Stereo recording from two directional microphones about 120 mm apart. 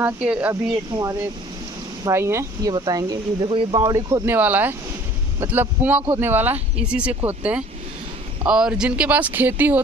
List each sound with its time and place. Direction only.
0.0 s speech: 10° right (ahead or behind)
0.5 s speech: 25° right (ahead or behind)
2.7 s speech: 40° right (ahead or behind)
3.8 s speech: 35° right (ahead or behind)
4.3 s speech: 15° right (ahead or behind)